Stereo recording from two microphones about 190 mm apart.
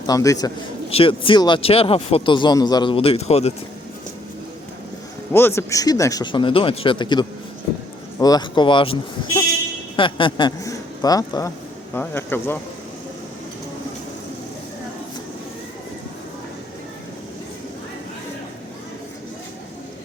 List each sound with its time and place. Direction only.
0.1 s speech: 20° left (ahead or behind)
0.9 s speech: 30° left (ahead or behind)
5.3 s speech: 15° left (ahead or behind)